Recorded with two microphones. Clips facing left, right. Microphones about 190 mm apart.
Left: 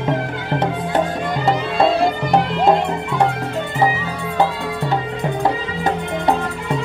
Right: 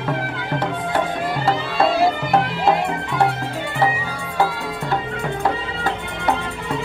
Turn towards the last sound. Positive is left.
turn(degrees=20)  # may be behind; listen again after turning